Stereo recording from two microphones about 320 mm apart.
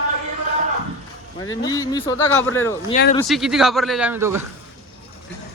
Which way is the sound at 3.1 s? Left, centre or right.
Centre.